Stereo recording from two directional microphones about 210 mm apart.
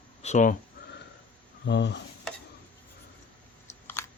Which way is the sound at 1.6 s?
55° left (ahead or behind).